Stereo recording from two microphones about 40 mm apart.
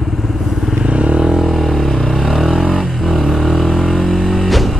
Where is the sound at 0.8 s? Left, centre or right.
Right.